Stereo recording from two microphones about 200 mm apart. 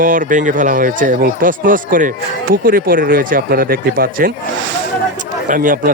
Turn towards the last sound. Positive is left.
turn(degrees=-40)  # may be behind; listen again after turning